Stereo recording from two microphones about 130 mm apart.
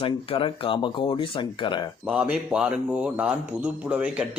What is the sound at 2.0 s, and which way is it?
A man's voice, 10° right (ahead or behind).